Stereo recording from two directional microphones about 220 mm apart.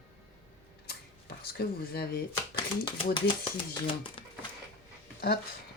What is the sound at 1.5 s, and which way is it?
Speech, 45° left (ahead or behind).